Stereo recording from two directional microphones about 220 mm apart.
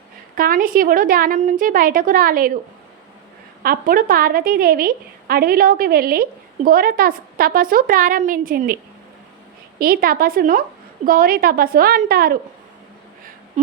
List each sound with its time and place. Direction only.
0.3 s a woman's voice: 40° right (ahead or behind)
3.6 s a woman's voice: 40° right (ahead or behind)